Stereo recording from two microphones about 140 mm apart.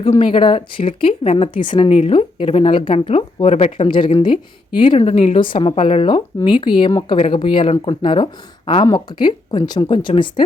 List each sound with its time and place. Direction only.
0.2 s speech: 35° left (ahead or behind)
1.9 s speech: 45° left (ahead or behind)
3.8 s speech: 35° left (ahead or behind)
4.9 s speech: 45° left (ahead or behind)